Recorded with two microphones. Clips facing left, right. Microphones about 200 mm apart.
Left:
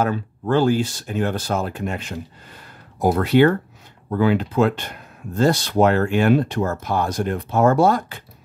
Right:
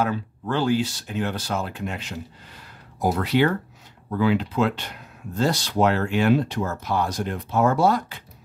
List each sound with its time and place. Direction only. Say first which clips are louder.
0.0 s speech: left 3 dB; 45° left (ahead or behind)